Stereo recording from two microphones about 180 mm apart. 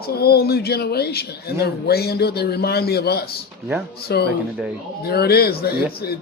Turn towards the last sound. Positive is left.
turn(degrees=60)  # may be behind; listen again after turning